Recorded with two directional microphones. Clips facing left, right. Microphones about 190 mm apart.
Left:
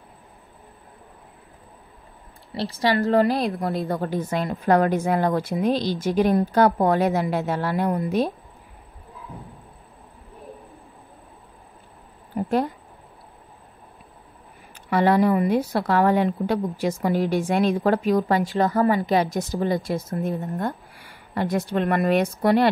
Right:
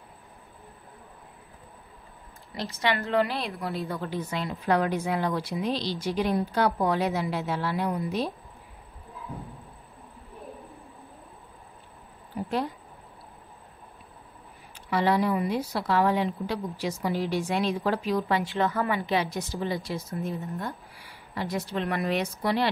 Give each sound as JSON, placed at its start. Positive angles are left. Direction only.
{"t": 2.5, "sound": "a woman's voice", "side_deg": 35}
{"t": 12.4, "sound": "a sound", "side_deg": 50}
{"t": 14.9, "sound": "a woman's voice", "side_deg": 50}